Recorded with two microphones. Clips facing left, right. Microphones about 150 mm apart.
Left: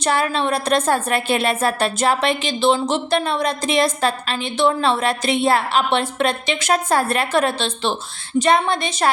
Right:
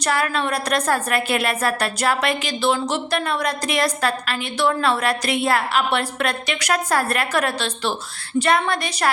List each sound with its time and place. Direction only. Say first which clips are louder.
0.0 s a woman's voice: left 2 dB; 25° left (ahead or behind)